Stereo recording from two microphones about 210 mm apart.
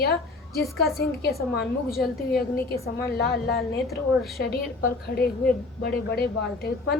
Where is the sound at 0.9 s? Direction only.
50° left (ahead or behind).